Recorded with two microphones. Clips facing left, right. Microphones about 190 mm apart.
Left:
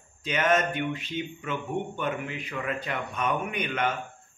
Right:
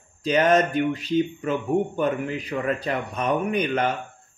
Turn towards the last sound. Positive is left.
turn(degrees=-35)  # may be behind; listen again after turning